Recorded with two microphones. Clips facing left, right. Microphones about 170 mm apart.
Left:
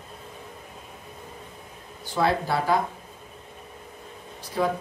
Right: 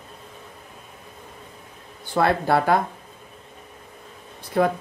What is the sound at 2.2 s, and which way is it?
Speech, 60° right (ahead or behind).